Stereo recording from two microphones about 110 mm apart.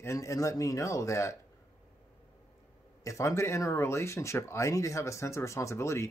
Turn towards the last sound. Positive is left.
turn(degrees=25)  # may be behind; listen again after turning